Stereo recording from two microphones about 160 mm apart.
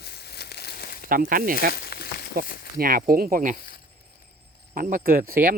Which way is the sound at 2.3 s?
65° right (ahead or behind).